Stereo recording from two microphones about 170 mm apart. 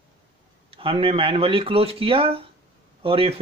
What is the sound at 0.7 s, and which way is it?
Speech, 30° right (ahead or behind).